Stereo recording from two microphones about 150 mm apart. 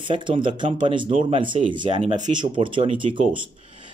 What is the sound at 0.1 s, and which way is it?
Speech, 35° right (ahead or behind).